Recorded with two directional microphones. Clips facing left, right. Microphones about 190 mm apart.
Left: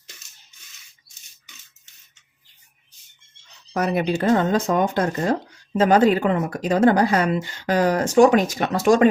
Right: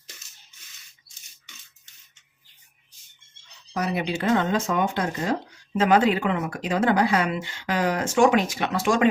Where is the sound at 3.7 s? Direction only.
50° left (ahead or behind).